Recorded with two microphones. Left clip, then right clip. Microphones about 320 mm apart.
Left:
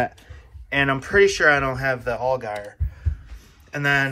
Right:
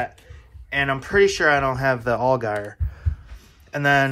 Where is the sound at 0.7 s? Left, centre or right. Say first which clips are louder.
Left 1 dB; centre.